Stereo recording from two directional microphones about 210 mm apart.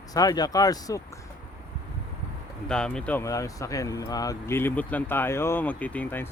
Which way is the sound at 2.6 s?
5° left (ahead or behind).